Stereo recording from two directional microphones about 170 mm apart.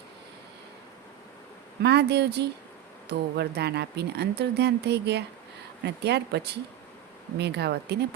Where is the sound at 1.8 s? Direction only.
75° right (ahead or behind).